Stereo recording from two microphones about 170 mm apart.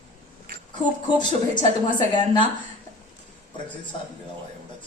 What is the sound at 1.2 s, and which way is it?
A woman's voice, 25° left (ahead or behind).